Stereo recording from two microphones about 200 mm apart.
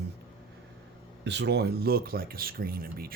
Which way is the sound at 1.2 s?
60° right (ahead or behind).